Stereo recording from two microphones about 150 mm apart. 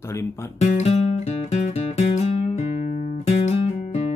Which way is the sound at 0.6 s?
45° left (ahead or behind).